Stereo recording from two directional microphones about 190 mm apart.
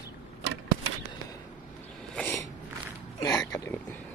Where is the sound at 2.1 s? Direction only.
10° left (ahead or behind).